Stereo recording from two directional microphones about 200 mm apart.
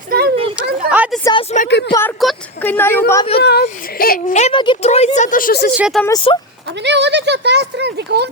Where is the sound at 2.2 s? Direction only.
10° left (ahead or behind).